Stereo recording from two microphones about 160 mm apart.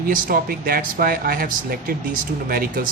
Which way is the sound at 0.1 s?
65° right (ahead or behind).